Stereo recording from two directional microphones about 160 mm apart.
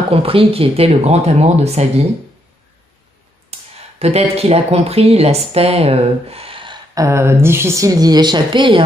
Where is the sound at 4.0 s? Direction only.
40° right (ahead or behind).